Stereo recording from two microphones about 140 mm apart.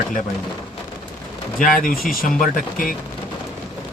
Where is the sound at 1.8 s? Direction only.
90° left.